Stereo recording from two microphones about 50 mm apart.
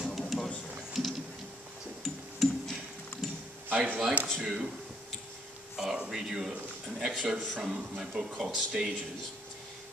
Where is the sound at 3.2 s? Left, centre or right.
Centre.